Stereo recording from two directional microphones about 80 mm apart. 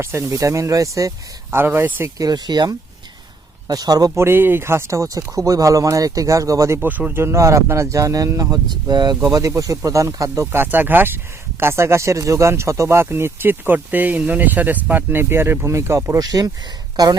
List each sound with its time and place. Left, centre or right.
0.0 s speech: right
1.5 s speech: right
2.1 s speech: right
4.1 s speech: right
6.7 s speech: centre; by 8.5 s right
8.7 s speech: right
9.6 s speech: right
10.4 s speech: right
16.1 s speech: right